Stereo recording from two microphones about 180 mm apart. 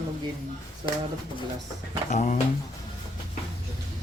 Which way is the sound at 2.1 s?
45° left (ahead or behind).